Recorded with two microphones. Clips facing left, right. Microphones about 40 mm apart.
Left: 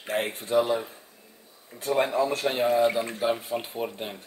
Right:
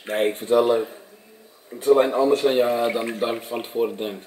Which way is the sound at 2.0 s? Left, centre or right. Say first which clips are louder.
Right 6 dB; right.